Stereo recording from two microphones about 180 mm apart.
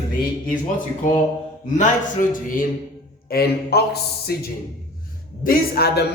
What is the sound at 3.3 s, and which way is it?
Speech, 60° left (ahead or behind).